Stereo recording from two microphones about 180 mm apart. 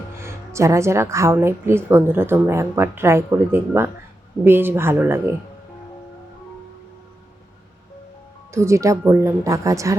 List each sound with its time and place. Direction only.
0.2 s a woman's voice: 15° right (ahead or behind)
8.5 s a woman's voice: 15° right (ahead or behind)